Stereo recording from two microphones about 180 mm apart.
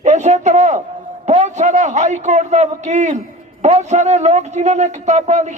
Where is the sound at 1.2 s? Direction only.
40° right (ahead or behind).